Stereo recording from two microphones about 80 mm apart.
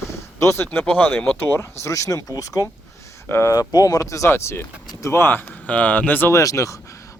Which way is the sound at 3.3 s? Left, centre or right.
Left.